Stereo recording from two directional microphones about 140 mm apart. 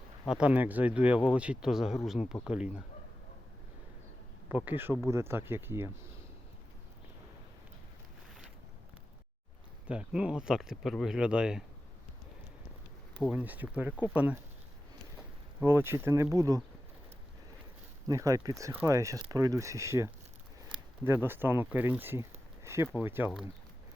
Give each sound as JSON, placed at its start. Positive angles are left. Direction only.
{"t": 0.3, "sound": "speech", "side_deg": -10}
{"t": 4.4, "sound": "speech", "side_deg": -15}
{"t": 9.8, "sound": "speech", "side_deg": -10}
{"t": 13.3, "sound": "speech", "side_deg": -10}
{"t": 15.6, "sound": "speech", "side_deg": -20}
{"t": 18.1, "sound": "speech", "side_deg": -25}